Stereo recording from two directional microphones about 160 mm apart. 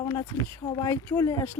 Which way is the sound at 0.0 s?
25° left (ahead or behind).